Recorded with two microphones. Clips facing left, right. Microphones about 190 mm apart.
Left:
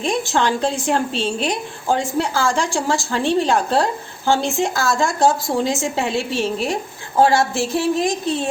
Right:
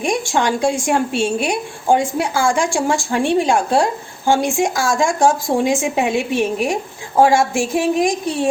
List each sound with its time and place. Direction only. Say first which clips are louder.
0.0 s a woman's voice: right 1 dB; 15° right (ahead or behind)